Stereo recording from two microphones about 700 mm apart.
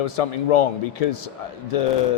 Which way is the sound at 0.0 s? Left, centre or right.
Left.